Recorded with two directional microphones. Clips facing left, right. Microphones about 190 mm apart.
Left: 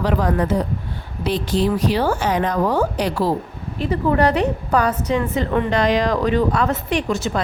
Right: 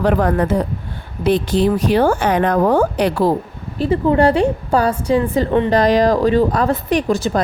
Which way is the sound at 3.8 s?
30° right (ahead or behind).